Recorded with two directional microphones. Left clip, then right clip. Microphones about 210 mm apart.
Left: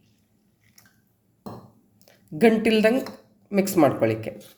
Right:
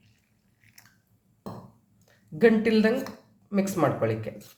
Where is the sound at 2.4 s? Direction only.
35° left (ahead or behind).